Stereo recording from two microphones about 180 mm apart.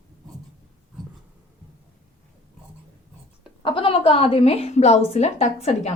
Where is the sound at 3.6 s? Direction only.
30° left (ahead or behind).